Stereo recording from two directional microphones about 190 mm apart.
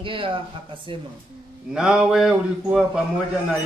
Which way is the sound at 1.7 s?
5° right (ahead or behind).